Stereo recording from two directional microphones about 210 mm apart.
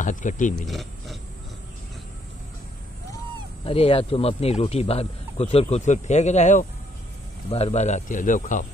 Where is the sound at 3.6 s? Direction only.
25° left (ahead or behind).